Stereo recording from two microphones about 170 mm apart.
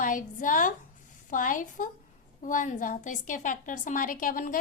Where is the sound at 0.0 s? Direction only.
50° left (ahead or behind).